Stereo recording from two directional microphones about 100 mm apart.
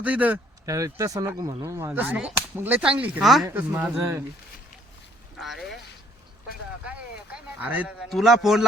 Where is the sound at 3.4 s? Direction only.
20° right (ahead or behind).